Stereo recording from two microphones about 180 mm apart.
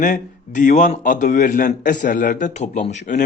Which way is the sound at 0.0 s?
45° left (ahead or behind).